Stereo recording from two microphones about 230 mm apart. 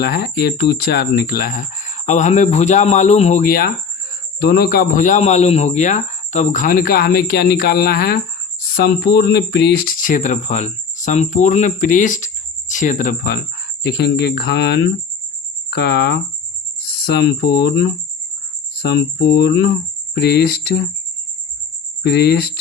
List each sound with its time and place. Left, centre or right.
0.0 s a man's voice: left
22.0 s speech: left